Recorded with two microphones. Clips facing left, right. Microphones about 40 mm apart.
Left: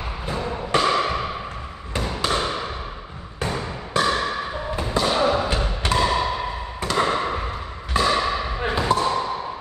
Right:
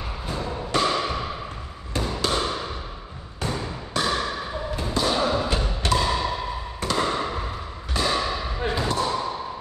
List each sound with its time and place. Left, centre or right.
0.3 s music: left
2.0 s a sound: left
4.7 s basketball bounce: centre
5.9 s music: left
7.0 s basketball bounce: left